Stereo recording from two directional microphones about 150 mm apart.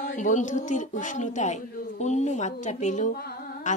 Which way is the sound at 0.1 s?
55° left (ahead or behind).